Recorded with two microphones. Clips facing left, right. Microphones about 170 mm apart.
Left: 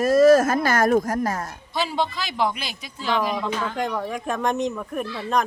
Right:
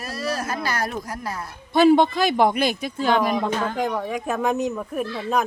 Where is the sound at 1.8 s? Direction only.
55° right (ahead or behind).